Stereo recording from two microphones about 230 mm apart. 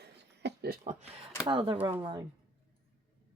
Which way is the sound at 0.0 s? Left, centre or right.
Right.